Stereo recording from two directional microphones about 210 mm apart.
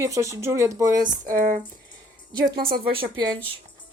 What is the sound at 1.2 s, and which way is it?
Speech, 40° right (ahead or behind).